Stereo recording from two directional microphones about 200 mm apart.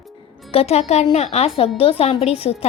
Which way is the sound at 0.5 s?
30° left (ahead or behind).